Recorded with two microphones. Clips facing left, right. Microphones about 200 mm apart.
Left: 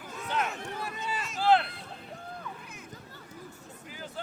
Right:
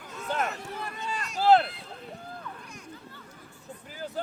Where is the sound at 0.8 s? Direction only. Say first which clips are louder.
Even; 5° left (ahead or behind).